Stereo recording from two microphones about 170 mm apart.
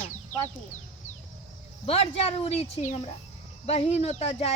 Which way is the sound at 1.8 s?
35° left (ahead or behind).